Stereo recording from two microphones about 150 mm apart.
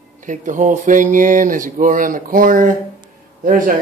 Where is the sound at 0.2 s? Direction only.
60° right (ahead or behind).